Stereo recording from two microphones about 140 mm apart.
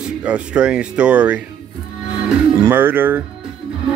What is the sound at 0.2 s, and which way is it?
Speech, 10° right (ahead or behind).